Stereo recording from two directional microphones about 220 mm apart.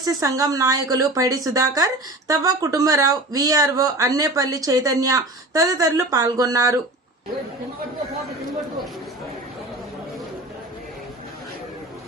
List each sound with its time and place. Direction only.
0.0 s speech: 15° right (ahead or behind)